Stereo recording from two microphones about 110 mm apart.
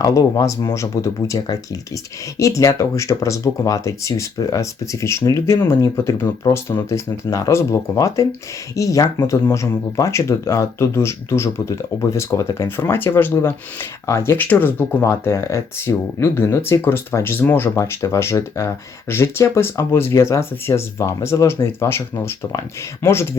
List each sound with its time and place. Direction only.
0.0 s speech: 30° left (ahead or behind)